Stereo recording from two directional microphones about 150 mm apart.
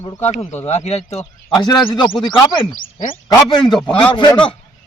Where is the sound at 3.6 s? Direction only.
5° left (ahead or behind).